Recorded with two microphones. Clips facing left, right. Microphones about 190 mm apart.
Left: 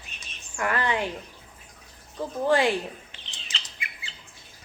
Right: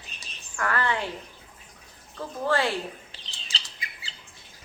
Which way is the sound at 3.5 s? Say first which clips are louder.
Even; 35° right (ahead or behind).